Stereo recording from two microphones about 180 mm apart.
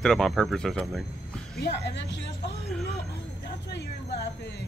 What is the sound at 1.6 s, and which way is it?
Speech, 65° left (ahead or behind).